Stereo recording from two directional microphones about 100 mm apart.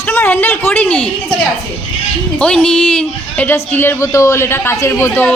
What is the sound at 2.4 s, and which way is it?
A woman's voice, 10° left (ahead or behind).